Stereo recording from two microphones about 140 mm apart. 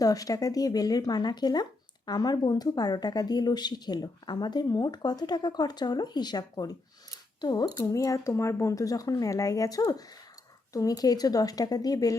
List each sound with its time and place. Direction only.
0.0 s a woman's voice: 25° left (ahead or behind)